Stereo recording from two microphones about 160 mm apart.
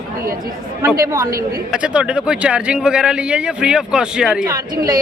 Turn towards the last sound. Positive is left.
turn(degrees=-5)  # may be behind; listen again after turning